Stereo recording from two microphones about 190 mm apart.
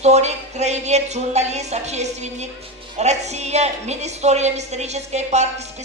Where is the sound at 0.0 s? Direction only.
35° right (ahead or behind).